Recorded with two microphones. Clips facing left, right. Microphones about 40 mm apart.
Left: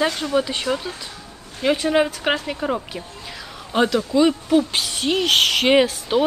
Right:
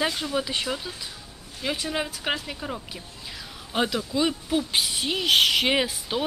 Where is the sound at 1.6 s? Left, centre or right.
Left.